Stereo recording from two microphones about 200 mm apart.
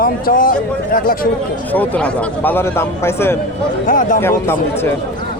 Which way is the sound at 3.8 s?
40° left (ahead or behind).